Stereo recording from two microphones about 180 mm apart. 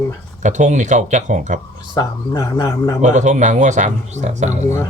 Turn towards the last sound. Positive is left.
turn(degrees=-40)  # may be behind; listen again after turning